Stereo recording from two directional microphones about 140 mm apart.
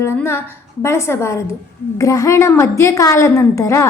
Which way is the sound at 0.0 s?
15° left (ahead or behind).